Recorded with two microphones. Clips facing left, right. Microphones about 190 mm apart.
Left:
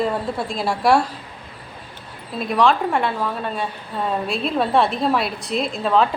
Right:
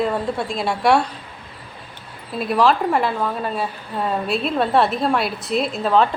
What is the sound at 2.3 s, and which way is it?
A woman's voice, 5° right (ahead or behind).